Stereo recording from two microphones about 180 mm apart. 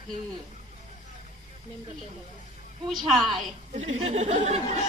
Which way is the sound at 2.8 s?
Centre (ahead or behind).